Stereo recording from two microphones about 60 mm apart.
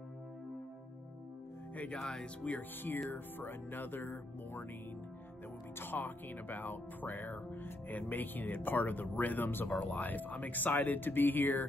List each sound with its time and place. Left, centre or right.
2.0 s speech: centre
2.4 s speech: left
3.1 s speech: left
5.8 s speech: left